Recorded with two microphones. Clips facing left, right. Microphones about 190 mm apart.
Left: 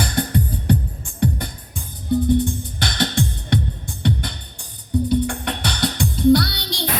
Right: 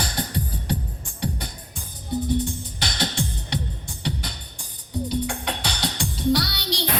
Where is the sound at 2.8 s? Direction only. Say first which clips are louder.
Left 5 dB; 60° left (ahead or behind).